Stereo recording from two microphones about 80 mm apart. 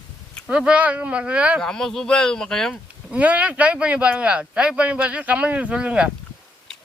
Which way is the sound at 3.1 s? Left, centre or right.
Centre.